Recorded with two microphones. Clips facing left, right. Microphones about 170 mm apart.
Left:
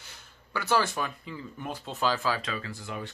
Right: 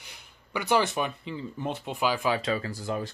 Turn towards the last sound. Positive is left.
turn(degrees=-35)  # may be behind; listen again after turning